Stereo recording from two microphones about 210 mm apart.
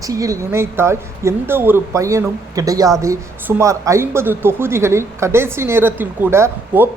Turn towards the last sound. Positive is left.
turn(degrees=-10)  # may be behind; listen again after turning